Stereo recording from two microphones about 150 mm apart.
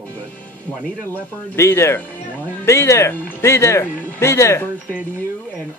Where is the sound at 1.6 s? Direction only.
15° left (ahead or behind).